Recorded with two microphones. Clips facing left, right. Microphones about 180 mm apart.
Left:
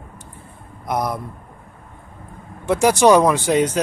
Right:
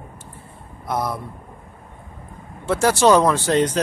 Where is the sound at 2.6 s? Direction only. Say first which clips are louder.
Left 2 dB; 15° left (ahead or behind).